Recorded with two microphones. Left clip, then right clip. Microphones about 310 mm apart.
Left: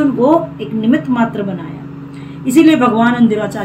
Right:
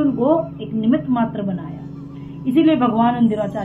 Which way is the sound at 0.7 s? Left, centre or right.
Centre.